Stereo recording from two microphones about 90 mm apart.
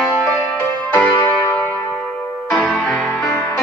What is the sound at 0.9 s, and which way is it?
Music, 20° left (ahead or behind).